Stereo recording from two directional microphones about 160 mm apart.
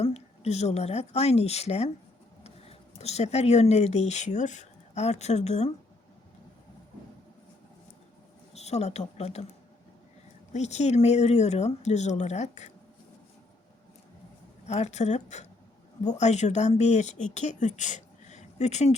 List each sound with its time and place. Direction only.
0.0 s speech: 45° left (ahead or behind)
8.5 s speech: 45° left (ahead or behind)
10.5 s speech: 45° left (ahead or behind)
14.7 s speech: 45° left (ahead or behind)